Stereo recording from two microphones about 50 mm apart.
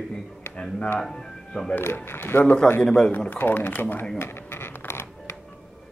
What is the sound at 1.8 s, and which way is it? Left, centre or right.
Speech, left.